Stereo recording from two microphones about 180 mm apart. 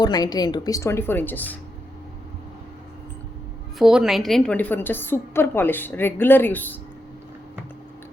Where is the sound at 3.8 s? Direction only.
5° right (ahead or behind).